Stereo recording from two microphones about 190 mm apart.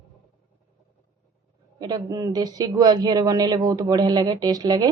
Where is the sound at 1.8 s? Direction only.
20° right (ahead or behind).